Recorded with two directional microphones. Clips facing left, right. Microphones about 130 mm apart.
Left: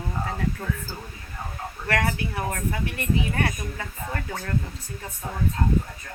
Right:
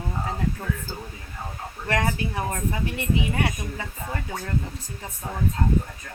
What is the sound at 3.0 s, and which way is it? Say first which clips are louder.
Speech: even; 15° right (ahead or behind).